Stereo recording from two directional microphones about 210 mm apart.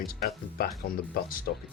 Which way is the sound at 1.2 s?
45° left (ahead or behind).